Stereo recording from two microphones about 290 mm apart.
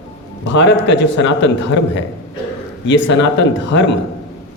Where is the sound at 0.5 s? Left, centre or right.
Left.